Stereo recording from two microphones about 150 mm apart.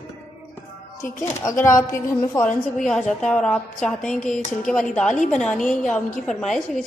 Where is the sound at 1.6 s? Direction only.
20° left (ahead or behind).